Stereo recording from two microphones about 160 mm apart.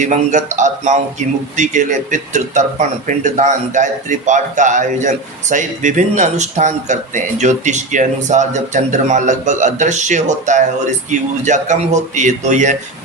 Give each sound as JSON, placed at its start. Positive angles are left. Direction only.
{"t": 0.0, "sound": "a man's voice", "side_deg": -50}